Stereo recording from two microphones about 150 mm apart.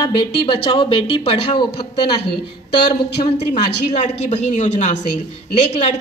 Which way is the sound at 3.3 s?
45° left (ahead or behind).